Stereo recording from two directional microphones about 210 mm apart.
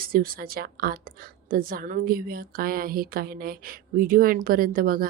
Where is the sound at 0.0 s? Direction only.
45° right (ahead or behind).